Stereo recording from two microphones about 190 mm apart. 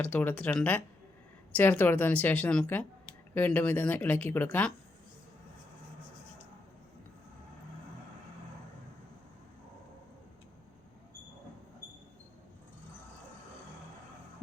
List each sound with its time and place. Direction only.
0.0 s speech: 10° left (ahead or behind)